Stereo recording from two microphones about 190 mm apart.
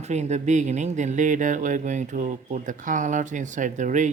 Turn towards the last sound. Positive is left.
turn(degrees=-40)  # may be behind; listen again after turning